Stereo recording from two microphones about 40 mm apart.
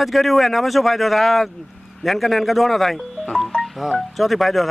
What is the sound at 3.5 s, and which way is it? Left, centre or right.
Music, left.